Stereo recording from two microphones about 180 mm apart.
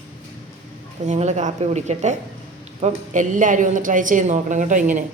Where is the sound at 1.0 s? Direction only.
40° right (ahead or behind).